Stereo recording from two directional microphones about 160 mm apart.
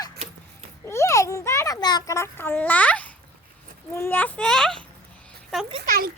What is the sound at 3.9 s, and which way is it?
Speech, 15° left (ahead or behind).